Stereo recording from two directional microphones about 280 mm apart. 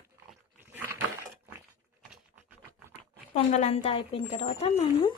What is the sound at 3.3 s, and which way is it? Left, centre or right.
Speech, left.